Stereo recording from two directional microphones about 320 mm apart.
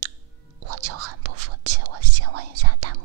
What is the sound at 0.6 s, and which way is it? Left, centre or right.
Whispering, right.